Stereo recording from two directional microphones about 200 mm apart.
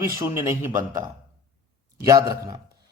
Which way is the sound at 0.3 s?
15° right (ahead or behind).